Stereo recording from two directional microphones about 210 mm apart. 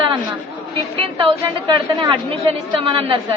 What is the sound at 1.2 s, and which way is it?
A woman's voice, 20° right (ahead or behind).